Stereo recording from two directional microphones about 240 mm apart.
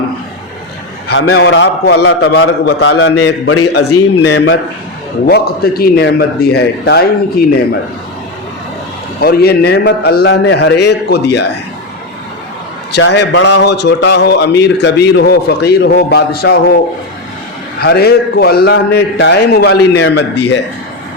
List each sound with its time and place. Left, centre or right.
1.0 s a man's voice: left
2.9 s a man's voice: left
3.2 s a man's voice: left
9.2 s a man's voice: left
12.9 s a man's voice: left
17.7 s a man's voice: left